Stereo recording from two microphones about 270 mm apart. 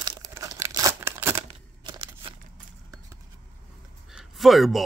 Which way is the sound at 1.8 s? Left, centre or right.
Centre.